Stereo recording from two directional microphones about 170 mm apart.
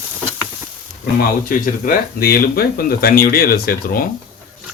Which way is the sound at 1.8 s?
60° left (ahead or behind).